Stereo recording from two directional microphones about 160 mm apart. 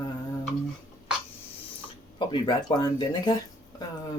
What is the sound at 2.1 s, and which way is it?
Speech, 30° left (ahead or behind).